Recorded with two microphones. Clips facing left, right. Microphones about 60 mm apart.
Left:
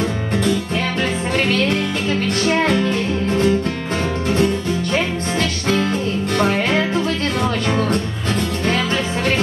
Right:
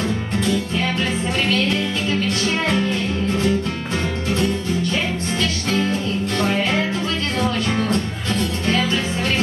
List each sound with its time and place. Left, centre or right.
1.5 s speech: left
2.4 s music: left
4.9 s music: left